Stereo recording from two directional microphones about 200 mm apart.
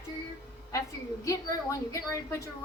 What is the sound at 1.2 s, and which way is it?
Speech, 15° left (ahead or behind).